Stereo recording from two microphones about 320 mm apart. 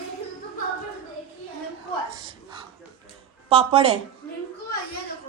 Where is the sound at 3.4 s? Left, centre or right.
Centre.